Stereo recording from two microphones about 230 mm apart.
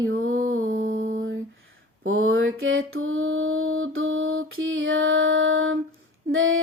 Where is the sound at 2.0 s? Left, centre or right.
Right.